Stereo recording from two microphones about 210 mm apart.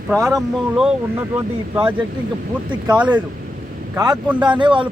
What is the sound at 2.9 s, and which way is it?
Speech, 5° right (ahead or behind).